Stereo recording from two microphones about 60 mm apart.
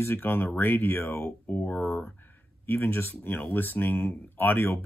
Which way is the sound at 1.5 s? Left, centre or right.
Left.